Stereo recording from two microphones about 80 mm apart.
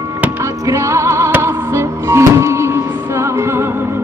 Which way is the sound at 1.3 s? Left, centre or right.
Right.